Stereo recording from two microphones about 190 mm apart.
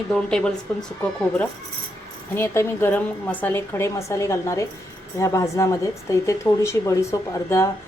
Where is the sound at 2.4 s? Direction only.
10° left (ahead or behind).